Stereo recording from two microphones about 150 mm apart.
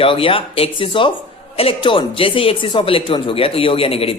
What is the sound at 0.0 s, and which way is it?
A man's voice, 35° left (ahead or behind).